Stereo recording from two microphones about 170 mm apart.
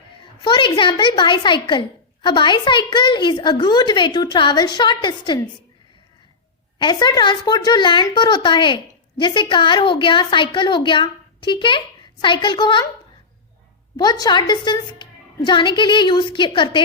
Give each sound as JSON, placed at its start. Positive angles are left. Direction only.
{"t": 0.4, "sound": "speech", "side_deg": 30}
{"t": 6.7, "sound": "speech", "side_deg": 25}
{"t": 13.9, "sound": "speech", "side_deg": 25}